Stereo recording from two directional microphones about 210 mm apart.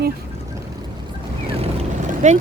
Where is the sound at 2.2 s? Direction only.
35° right (ahead or behind).